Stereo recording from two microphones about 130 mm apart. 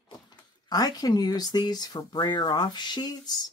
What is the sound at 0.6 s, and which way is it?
Speech, 30° left (ahead or behind).